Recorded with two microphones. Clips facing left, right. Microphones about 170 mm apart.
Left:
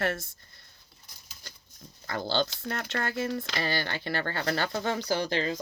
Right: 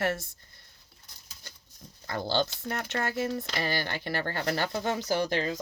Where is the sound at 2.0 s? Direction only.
20° right (ahead or behind).